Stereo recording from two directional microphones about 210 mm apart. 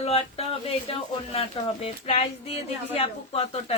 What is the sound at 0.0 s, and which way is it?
A woman's voice, 30° left (ahead or behind).